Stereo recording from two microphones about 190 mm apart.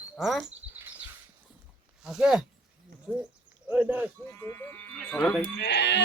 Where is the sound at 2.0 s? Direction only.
5° right (ahead or behind).